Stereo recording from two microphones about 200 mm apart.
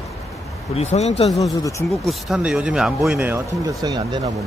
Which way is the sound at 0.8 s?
35° left (ahead or behind).